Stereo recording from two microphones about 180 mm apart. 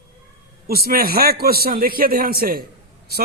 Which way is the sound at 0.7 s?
55° right (ahead or behind).